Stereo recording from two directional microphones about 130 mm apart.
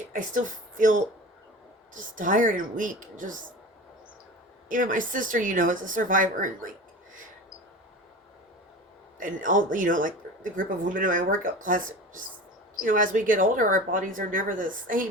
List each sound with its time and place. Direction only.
0.1 s speech: 85° right
4.7 s speech: 90° right
9.1 s speech: 90° right